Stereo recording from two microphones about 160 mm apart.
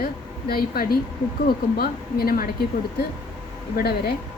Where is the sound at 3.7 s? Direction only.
75° left (ahead or behind).